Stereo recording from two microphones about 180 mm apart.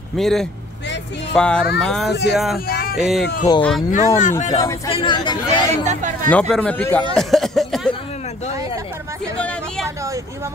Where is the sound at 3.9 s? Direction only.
45° left (ahead or behind).